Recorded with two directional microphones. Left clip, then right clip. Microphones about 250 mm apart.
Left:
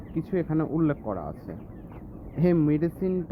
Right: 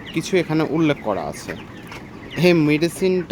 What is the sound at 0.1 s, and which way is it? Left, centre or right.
Speech, centre.